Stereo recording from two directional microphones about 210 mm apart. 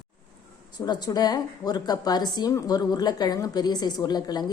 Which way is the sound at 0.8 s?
20° left (ahead or behind).